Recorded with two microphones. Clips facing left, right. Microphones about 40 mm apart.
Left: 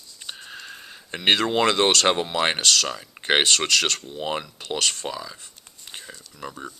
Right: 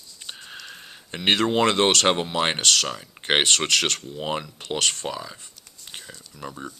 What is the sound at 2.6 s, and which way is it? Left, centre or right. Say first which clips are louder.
Speech: even; right.